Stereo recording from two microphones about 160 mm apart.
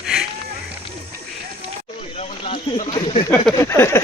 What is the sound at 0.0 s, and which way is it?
Rowboat, 5° right (ahead or behind).